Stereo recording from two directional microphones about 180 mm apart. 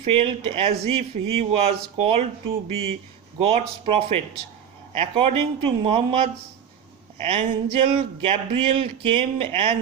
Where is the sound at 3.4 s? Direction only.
35° right (ahead or behind).